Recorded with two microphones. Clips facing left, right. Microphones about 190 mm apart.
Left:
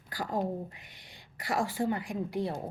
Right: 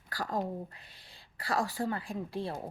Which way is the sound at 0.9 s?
30° right (ahead or behind).